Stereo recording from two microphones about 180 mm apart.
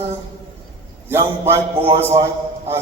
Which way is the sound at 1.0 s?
15° right (ahead or behind).